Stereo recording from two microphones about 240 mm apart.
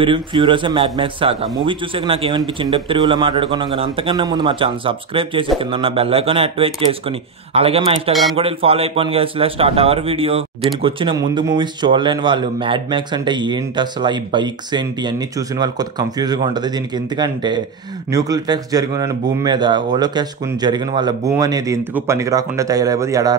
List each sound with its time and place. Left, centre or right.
0.0 s speech: right